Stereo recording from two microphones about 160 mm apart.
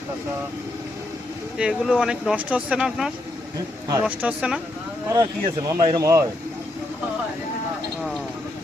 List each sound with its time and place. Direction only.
1.5 s speech: 5° right (ahead or behind)
5.0 s speech: 20° right (ahead or behind)